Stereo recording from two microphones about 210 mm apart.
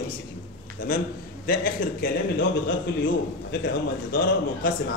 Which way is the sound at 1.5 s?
45° left (ahead or behind).